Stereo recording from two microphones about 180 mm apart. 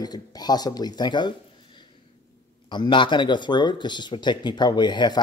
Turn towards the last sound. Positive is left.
turn(degrees=25)  # may be behind; listen again after turning